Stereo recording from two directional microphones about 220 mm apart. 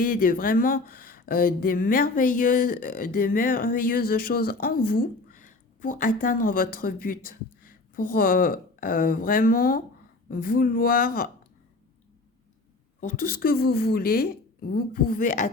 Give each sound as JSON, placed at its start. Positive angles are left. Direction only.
{"t": 0.0, "sound": "speech", "side_deg": 40}
{"t": 13.0, "sound": "speech", "side_deg": 35}